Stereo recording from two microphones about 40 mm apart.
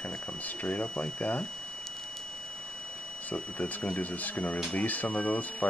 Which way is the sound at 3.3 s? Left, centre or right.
Left.